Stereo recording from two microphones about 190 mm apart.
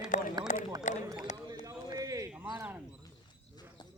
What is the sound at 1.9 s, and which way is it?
Clip-clop, 20° right (ahead or behind).